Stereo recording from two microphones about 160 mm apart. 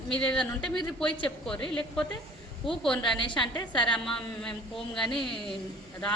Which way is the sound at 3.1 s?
30° left (ahead or behind).